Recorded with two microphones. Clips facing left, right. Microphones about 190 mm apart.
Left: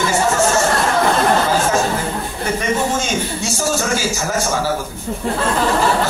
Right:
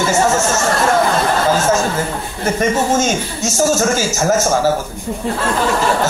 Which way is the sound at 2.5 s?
45° right (ahead or behind).